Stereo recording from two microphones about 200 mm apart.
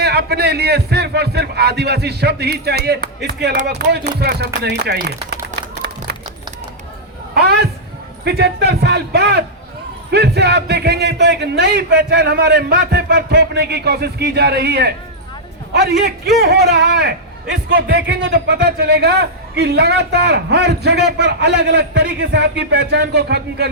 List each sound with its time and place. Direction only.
0.0 s a man's voice: 55° right (ahead or behind)
5.8 s music: 55° right (ahead or behind)
7.3 s a sound: 55° right (ahead or behind)
8.2 s a man's voice: 55° right (ahead or behind)